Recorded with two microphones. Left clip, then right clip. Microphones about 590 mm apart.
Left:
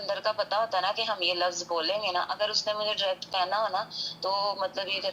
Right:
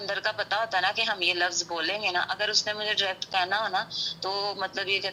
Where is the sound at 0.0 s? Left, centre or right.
Right.